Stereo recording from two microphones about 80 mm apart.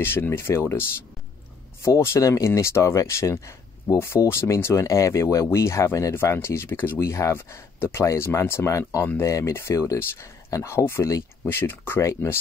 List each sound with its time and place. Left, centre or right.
0.0 s speech: left
11.4 s speech: left